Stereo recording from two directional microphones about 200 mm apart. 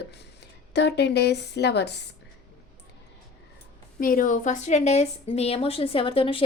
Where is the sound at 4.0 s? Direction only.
45° left (ahead or behind).